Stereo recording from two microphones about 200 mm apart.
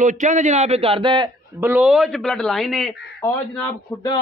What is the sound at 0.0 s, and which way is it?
A man's voice, 40° right (ahead or behind).